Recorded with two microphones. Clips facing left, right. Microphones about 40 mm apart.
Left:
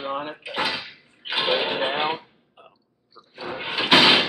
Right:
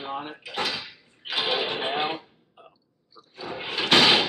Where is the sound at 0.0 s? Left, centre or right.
Centre.